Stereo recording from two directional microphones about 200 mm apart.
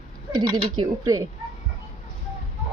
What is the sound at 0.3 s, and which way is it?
Speech, 20° right (ahead or behind).